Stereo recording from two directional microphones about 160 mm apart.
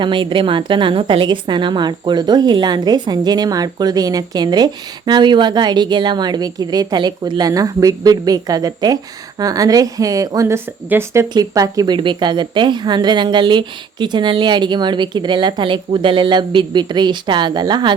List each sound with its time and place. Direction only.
0.0 s a woman's voice: 30° right (ahead or behind)